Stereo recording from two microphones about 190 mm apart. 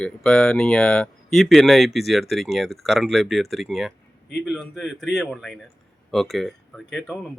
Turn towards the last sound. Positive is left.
turn(degrees=0)  # may be behind; listen again after turning